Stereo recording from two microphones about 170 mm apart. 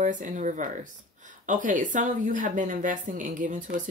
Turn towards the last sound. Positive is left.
turn(degrees=-50)  # may be behind; listen again after turning